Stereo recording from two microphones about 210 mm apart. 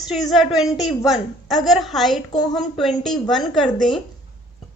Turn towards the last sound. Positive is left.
turn(degrees=0)  # may be behind; listen again after turning